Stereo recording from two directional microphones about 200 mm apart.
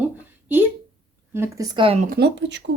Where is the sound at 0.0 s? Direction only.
10° right (ahead or behind).